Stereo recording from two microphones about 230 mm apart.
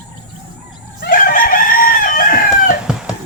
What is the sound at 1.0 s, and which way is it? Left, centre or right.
Chicken, left.